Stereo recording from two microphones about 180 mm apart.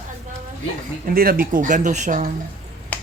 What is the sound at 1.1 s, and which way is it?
Speech, 55° right (ahead or behind).